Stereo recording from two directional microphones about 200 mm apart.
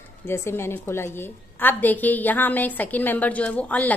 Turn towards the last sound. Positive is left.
turn(degrees=5)  # may be behind; listen again after turning